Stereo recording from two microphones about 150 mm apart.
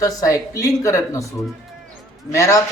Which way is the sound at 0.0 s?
20° left (ahead or behind).